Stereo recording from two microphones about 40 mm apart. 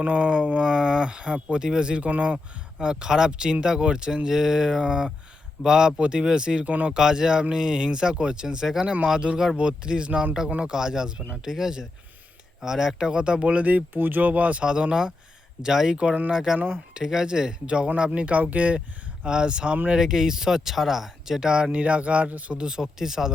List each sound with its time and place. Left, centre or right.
0.0 s speech: right
2.0 s speech: right
2.8 s speech: centre
6.7 s speech: right
6.9 s speech: centre; by 13.8 s right
13.9 s speech: right
14.6 s speech: right
16.6 s speech: right
16.9 s speech: centre
17.7 s speech: right
19.2 s speech: right
21.4 s speech: right
21.7 s speech: right
22.5 s speech: right